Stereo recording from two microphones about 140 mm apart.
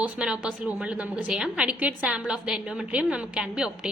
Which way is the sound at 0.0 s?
5° right (ahead or behind).